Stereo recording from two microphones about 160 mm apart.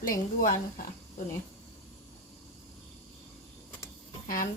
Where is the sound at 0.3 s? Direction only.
60° left (ahead or behind).